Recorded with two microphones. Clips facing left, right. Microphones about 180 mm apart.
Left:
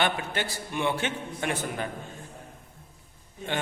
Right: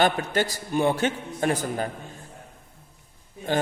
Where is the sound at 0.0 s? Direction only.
40° right (ahead or behind).